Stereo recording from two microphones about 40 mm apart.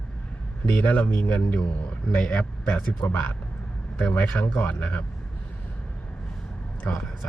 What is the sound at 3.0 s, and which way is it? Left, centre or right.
Speech, left.